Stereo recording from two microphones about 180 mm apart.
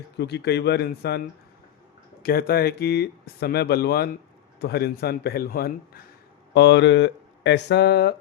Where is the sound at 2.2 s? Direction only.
55° left (ahead or behind).